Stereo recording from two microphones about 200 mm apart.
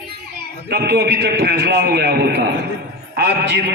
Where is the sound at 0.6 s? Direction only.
55° right (ahead or behind).